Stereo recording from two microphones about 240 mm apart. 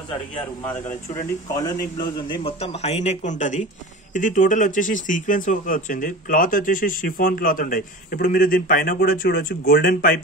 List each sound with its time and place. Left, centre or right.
0.8 s a man's voice: centre; by 10.2 s left